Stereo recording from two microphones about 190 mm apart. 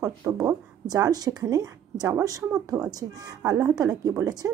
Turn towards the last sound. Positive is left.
turn(degrees=-20)  # may be behind; listen again after turning